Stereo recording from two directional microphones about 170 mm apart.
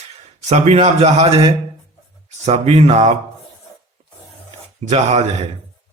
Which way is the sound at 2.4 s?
35° right (ahead or behind).